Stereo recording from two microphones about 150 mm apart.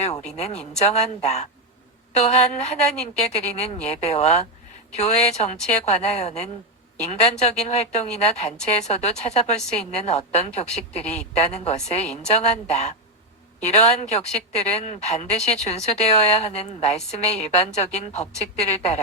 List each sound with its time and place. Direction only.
0.3 s a woman's voice: 45° left (ahead or behind)